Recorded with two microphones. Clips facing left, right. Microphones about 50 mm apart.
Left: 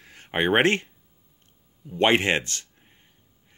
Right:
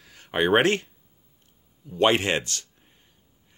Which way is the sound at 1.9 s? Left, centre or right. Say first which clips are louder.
Left 1 dB; left.